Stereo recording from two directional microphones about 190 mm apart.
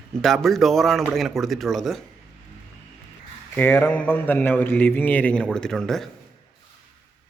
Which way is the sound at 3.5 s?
10° left (ahead or behind).